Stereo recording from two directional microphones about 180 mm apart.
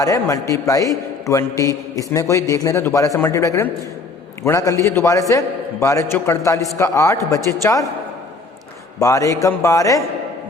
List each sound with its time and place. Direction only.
0.0 s a man's voice: 20° left (ahead or behind)
9.0 s a man's voice: 20° left (ahead or behind)